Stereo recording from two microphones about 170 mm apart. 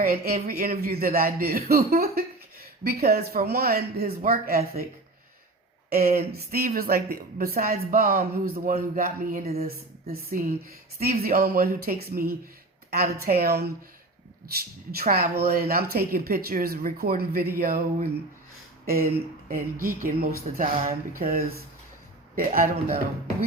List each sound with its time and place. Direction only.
0.0 s a woman's voice: 60° right (ahead or behind)
5.9 s a woman's voice: 60° right (ahead or behind)
9.4 s speech: 40° right (ahead or behind)
9.6 s a woman's voice: 60° right (ahead or behind)
19.5 s a woman's voice: 55° right (ahead or behind)